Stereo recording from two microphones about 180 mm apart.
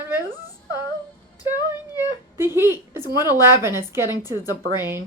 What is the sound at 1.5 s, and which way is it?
Speech, 20° left (ahead or behind).